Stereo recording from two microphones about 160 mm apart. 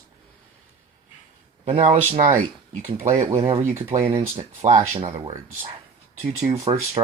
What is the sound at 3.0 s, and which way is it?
Speech, 50° right (ahead or behind).